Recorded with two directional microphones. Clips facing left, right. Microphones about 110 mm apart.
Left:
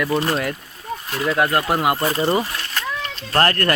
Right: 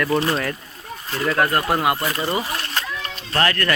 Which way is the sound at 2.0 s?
35° left (ahead or behind).